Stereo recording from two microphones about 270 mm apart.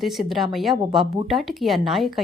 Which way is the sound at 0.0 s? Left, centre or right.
Centre.